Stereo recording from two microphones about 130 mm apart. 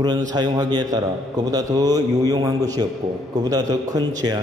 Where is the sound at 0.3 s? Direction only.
35° right (ahead or behind).